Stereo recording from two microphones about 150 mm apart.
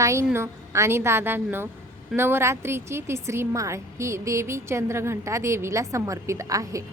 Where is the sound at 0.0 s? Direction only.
20° right (ahead or behind).